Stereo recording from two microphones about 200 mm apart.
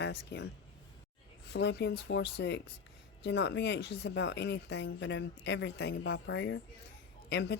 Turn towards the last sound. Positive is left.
turn(degrees=60)  # may be behind; listen again after turning